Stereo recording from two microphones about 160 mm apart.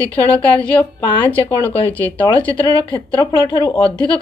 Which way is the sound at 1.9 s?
10° left (ahead or behind).